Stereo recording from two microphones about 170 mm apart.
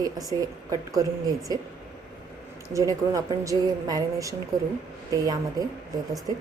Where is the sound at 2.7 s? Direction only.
20° right (ahead or behind).